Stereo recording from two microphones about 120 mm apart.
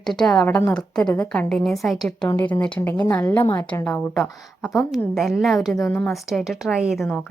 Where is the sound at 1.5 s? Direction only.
Centre (ahead or behind).